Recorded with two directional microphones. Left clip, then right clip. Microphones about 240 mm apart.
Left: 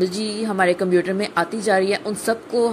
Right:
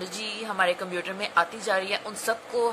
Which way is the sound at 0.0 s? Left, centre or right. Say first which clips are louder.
Left 10 dB; centre.